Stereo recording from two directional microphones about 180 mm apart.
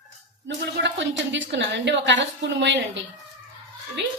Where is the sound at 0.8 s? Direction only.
90° right.